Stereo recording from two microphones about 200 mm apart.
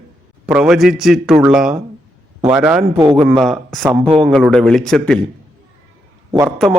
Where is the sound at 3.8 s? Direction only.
10° right (ahead or behind).